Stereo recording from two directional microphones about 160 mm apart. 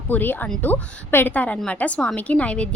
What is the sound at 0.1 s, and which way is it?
A woman's voice, 10° left (ahead or behind).